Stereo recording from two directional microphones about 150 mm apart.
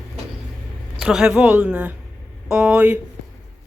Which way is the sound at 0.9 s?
5° right (ahead or behind).